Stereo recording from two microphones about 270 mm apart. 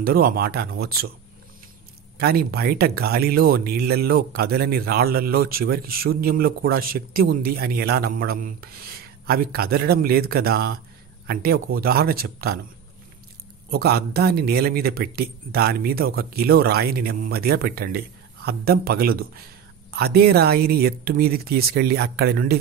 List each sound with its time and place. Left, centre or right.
0.0 s speech: right
2.1 s speech: right
13.7 s speech: right